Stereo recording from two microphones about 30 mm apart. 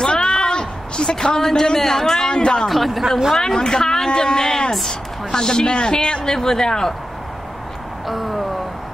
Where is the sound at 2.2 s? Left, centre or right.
Left.